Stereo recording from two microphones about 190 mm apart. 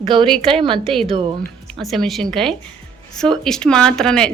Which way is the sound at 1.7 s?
Centre (ahead or behind).